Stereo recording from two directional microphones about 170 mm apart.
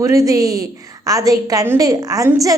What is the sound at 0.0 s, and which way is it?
A woman's voice, 20° right (ahead or behind).